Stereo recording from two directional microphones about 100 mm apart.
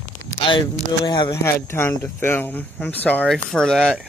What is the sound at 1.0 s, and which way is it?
Speech, 50° left (ahead or behind).